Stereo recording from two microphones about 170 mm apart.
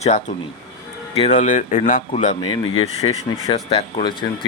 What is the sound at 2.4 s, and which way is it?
Speech, 30° left (ahead or behind).